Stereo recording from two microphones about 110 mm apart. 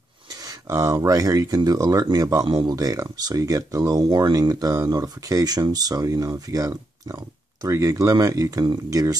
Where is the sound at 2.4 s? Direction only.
45° right (ahead or behind).